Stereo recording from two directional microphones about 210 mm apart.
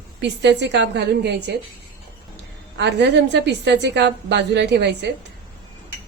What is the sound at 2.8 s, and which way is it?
A woman's voice, 55° right (ahead or behind).